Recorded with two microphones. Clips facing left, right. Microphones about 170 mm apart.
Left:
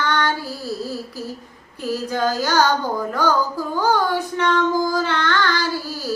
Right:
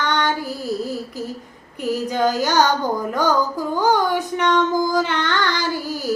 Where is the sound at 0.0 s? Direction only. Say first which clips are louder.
Even; 20° right (ahead or behind).